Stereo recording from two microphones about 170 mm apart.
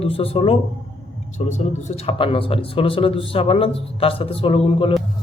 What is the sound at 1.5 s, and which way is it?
A man's voice, 45° left (ahead or behind).